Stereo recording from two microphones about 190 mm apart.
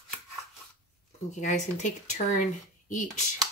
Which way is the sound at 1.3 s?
40° left (ahead or behind).